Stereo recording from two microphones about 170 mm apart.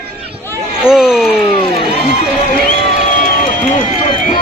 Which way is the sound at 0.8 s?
5° right (ahead or behind).